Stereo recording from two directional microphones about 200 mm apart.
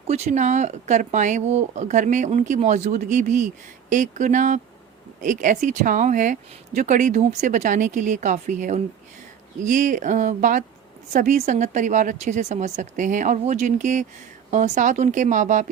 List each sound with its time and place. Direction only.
0.1 s speech: 35° right (ahead or behind)